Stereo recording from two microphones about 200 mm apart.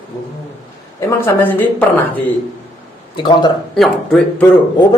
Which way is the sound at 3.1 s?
25° left (ahead or behind).